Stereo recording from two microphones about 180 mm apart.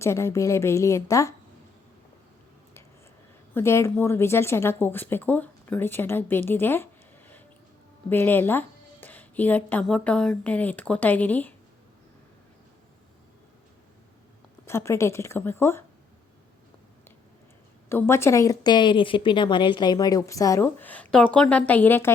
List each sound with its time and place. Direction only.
0.0 s a woman's voice: 15° left (ahead or behind)
3.5 s a woman's voice: 15° left (ahead or behind)
8.1 s a woman's voice: 10° left (ahead or behind)
14.7 s a woman's voice: 15° left (ahead or behind)
17.8 s a woman's voice: 15° left (ahead or behind)